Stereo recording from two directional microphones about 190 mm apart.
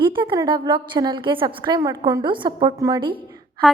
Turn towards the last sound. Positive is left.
turn(degrees=0)  # may be behind; listen again after turning